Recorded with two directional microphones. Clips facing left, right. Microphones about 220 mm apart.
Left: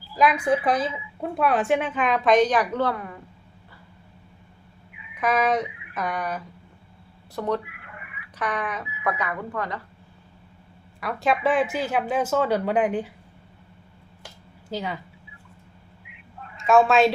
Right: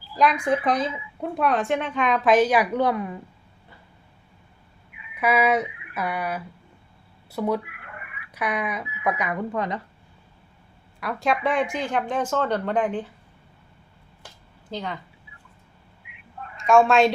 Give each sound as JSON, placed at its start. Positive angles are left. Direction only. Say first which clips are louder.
{"t": 0.2, "sound": "a woman's voice", "louder": "left 1 dB", "side_deg": 5}
{"t": 5.1, "sound": "a sound", "louder": "right 1 dB", "side_deg": -10}
{"t": 7.3, "sound": "speech", "louder": "right 1 dB", "side_deg": -10}
{"t": 7.9, "sound": "a sound", "louder": "right 2 dB", "side_deg": -55}
{"t": 8.4, "sound": "speech", "louder": "right 1 dB", "side_deg": -10}
{"t": 11.0, "sound": "speech", "louder": "left 1 dB", "side_deg": 0}
{"t": 14.7, "sound": "speech", "louder": "left 2 dB", "side_deg": 10}
{"t": 16.6, "sound": "a woman's voice", "louder": "even", "side_deg": 0}